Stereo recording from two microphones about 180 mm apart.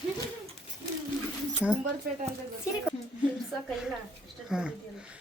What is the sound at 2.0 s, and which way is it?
Speech, 60° right (ahead or behind).